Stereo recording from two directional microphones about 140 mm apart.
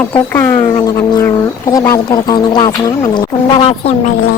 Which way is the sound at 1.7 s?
25° left (ahead or behind).